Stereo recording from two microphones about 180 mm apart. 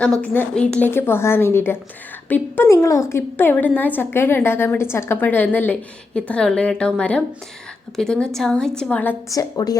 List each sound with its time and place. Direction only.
0.2 s a woman's voice: 5° left (ahead or behind)
9.3 s a woman's voice: 20° left (ahead or behind)